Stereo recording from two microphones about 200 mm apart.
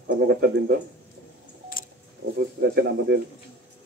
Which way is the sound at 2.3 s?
55° right (ahead or behind).